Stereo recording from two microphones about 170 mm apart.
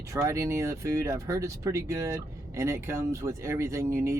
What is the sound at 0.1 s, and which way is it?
Speech, 15° right (ahead or behind).